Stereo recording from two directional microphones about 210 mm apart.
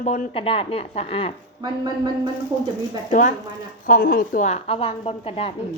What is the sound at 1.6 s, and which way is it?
Speech, 20° right (ahead or behind).